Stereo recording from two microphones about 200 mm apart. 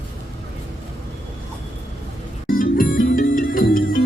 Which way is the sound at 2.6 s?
45° left (ahead or behind).